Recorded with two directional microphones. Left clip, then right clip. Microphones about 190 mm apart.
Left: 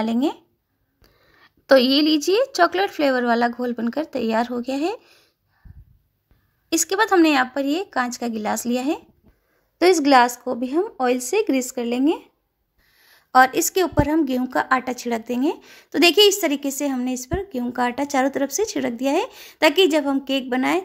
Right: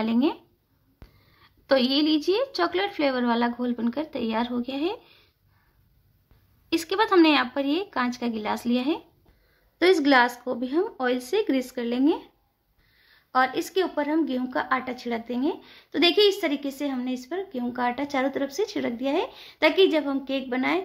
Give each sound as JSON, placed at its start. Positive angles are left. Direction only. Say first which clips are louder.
{"t": 0.0, "sound": "speech", "louder": "left 2 dB", "side_deg": 30}
{"t": 1.0, "sound": "a woman's voice", "louder": "left 4 dB", "side_deg": 40}
{"t": 6.7, "sound": "speech", "louder": "left 3 dB", "side_deg": 35}
{"t": 13.0, "sound": "a woman's voice", "louder": "left 8 dB", "side_deg": 50}